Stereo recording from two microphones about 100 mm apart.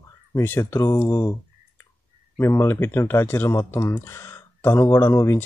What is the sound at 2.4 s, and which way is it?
Speech, 25° left (ahead or behind).